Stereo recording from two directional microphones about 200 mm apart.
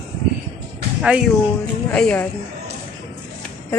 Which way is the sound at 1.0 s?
5° right (ahead or behind).